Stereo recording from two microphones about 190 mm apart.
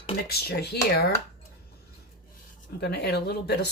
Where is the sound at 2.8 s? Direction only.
60° left (ahead or behind).